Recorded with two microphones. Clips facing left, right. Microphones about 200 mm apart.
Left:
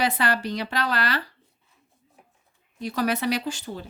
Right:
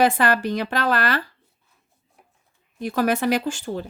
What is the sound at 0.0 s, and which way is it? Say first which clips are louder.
Speech: right 6 dB; 50° right (ahead or behind).